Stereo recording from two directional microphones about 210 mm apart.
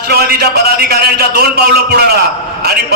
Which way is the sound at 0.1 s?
45° right (ahead or behind).